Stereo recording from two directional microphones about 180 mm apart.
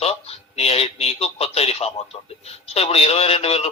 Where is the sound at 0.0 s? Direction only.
35° left (ahead or behind).